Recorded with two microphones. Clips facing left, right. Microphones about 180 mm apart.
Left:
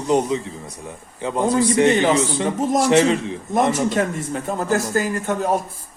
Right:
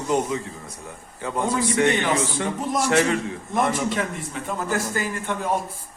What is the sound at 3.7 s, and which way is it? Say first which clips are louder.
A man's voice: left 5 dB; 40° left (ahead or behind).